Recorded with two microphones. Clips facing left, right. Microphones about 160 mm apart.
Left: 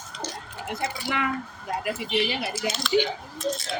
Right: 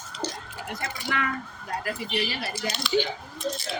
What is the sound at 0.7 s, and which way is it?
Speech, 15° left (ahead or behind).